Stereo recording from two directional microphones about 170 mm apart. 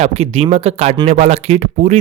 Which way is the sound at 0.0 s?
40° right (ahead or behind).